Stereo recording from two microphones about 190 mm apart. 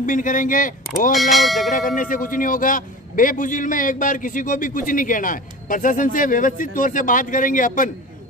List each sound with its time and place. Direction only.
0.0 s a man's voice: 45° left (ahead or behind)
1.1 s speech: centre (ahead or behind)
1.7 s a man's voice: 45° left (ahead or behind)